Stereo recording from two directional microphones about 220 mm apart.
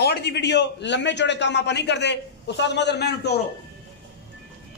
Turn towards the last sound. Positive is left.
turn(degrees=50)  # may be behind; listen again after turning